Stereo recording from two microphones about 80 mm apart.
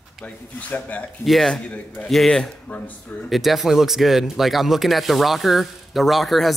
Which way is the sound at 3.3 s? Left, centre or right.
Centre.